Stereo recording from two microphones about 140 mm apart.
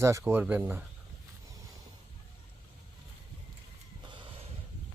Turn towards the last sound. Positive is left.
turn(degrees=-35)  # may be behind; listen again after turning